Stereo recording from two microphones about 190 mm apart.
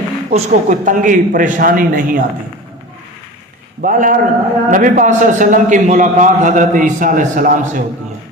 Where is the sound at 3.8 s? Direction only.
45° right (ahead or behind).